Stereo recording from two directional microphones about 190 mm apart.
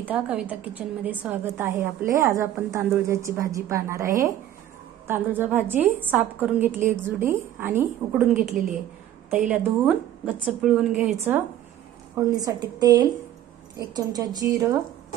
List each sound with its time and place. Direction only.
0.0 s a woman's voice: 5° right (ahead or behind)